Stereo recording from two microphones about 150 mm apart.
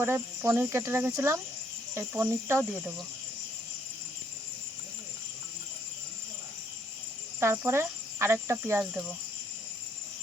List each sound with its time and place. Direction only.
0.0 s speech: 15° right (ahead or behind)
7.3 s speech: 15° right (ahead or behind)
8.8 s speech: 5° right (ahead or behind)